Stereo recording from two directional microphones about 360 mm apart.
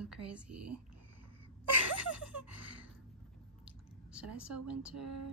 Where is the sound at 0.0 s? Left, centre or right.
Centre.